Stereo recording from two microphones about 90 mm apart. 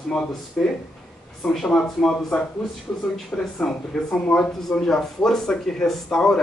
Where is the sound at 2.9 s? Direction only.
20° left (ahead or behind).